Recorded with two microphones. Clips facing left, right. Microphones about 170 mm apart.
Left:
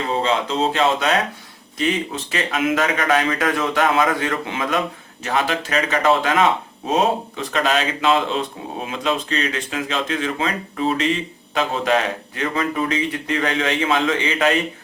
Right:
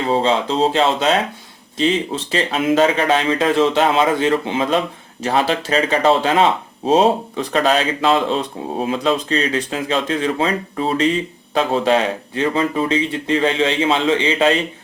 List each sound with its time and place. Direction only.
0.1 s speech: 30° right (ahead or behind)